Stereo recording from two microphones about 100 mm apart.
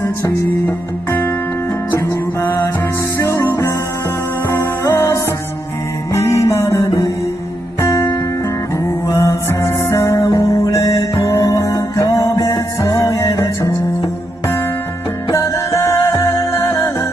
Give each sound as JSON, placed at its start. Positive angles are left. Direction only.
{"t": 0.0, "sound": "music", "side_deg": 30}
{"t": 7.8, "sound": "guitar", "side_deg": 25}
{"t": 9.0, "sound": "music", "side_deg": 30}
{"t": 15.3, "sound": "music", "side_deg": 30}